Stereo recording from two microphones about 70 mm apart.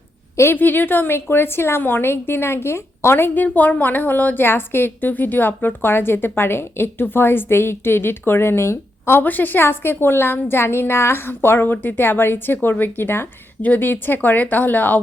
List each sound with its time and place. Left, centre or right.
0.3 s a woman's voice: left